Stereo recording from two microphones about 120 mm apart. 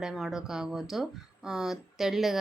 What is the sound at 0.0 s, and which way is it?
Speech, 5° right (ahead or behind).